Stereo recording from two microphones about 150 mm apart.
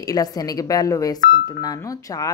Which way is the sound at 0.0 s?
25° left (ahead or behind).